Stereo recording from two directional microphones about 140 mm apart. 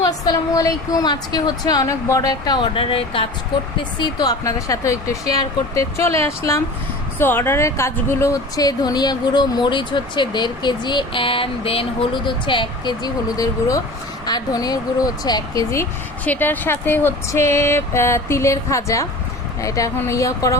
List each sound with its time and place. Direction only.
0.0 s speech: 25° left (ahead or behind)